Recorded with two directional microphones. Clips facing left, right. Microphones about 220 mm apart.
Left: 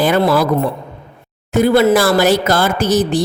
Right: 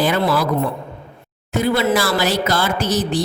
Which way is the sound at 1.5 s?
50° left (ahead or behind).